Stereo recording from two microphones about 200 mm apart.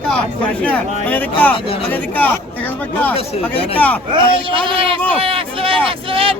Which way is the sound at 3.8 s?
10° left (ahead or behind).